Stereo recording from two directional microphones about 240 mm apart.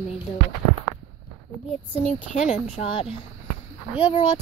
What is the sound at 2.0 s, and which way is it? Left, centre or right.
A woman's voice, left.